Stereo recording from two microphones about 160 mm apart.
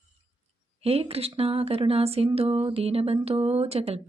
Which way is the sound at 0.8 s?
40° right (ahead or behind).